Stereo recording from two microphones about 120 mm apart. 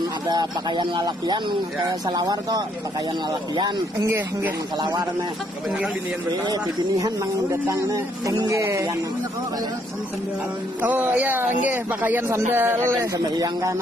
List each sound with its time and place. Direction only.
0.3 s speech: 35° right (ahead or behind)
6.4 s speech: 35° right (ahead or behind)
10.8 s speech: 15° right (ahead or behind)